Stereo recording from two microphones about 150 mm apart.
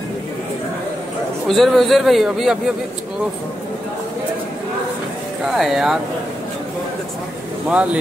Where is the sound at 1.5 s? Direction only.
Centre (ahead or behind).